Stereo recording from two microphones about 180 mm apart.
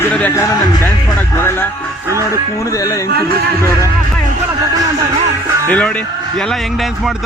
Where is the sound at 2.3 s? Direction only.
20° left (ahead or behind).